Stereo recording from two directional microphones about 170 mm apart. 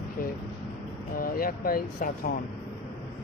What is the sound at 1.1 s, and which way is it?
Speech, 60° left (ahead or behind).